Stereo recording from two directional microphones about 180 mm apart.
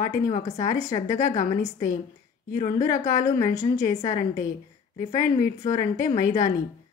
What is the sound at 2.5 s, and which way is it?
A woman's voice, 20° left (ahead or behind).